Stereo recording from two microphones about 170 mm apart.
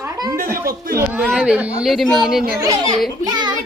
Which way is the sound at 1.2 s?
5° right (ahead or behind).